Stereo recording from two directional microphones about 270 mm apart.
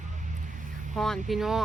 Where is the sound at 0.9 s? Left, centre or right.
Centre.